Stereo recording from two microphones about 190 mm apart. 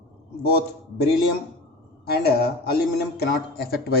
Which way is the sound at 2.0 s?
55° left (ahead or behind).